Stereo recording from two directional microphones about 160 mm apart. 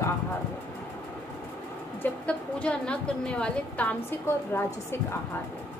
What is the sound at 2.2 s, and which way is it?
A woman's voice, 5° left (ahead or behind).